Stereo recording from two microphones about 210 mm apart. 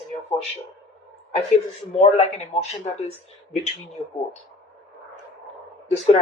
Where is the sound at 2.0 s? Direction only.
30° left (ahead or behind).